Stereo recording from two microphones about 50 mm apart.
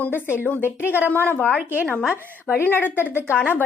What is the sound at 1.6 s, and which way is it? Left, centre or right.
Speech, right.